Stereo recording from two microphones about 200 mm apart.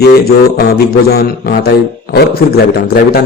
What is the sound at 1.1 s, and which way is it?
Speech, 50° left (ahead or behind).